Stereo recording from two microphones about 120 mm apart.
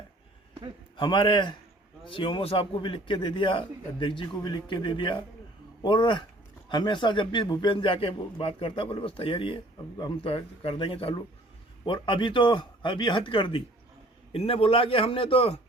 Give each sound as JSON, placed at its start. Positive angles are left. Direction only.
{"t": 0.9, "sound": "a man's voice", "side_deg": 45}